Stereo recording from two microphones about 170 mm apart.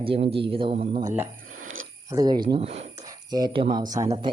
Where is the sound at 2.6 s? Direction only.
40° right (ahead or behind).